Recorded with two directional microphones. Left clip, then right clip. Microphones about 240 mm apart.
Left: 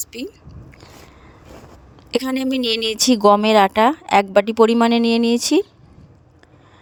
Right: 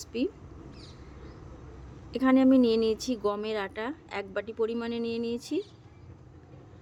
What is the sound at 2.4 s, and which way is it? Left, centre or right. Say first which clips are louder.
Speech: left 3 dB; left.